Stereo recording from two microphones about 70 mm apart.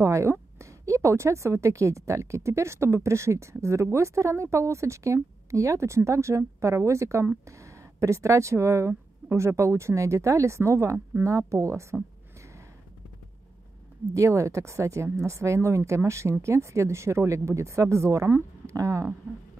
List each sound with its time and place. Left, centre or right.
0.0 s speech: right
14.1 s speech: right